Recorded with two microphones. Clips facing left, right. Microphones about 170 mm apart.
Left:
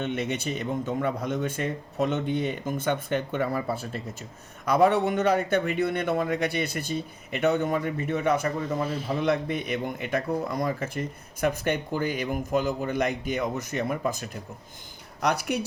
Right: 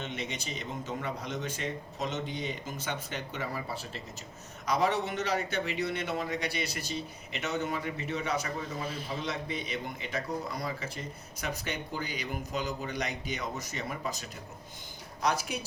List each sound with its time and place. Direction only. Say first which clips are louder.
0.0 s speech: left 9 dB; 60° left (ahead or behind)
15.2 s speech: left 5 dB; 65° left (ahead or behind)